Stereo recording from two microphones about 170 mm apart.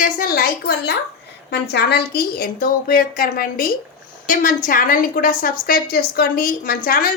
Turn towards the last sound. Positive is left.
turn(degrees=55)  # may be behind; listen again after turning